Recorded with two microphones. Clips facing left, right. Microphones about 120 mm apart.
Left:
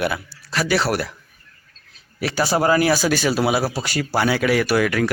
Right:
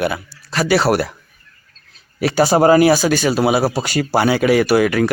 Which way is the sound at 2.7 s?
15° right (ahead or behind).